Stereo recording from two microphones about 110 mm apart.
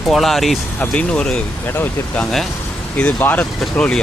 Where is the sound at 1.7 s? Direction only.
20° left (ahead or behind).